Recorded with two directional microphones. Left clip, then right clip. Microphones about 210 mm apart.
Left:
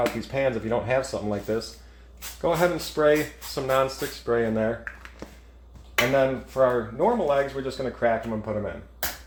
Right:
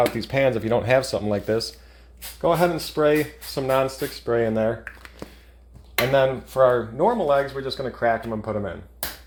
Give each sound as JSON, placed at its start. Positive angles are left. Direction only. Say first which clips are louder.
{"t": 0.0, "sound": "speech", "louder": "right 4 dB", "side_deg": -40}
{"t": 6.1, "sound": "speech", "louder": "right 5 dB", "side_deg": -40}